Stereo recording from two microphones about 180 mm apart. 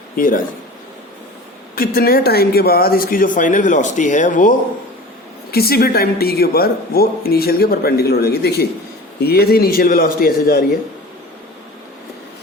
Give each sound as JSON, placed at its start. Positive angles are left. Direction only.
{"t": 0.2, "sound": "speech", "side_deg": 50}
{"t": 1.7, "sound": "speech", "side_deg": 55}
{"t": 5.5, "sound": "speech", "side_deg": 60}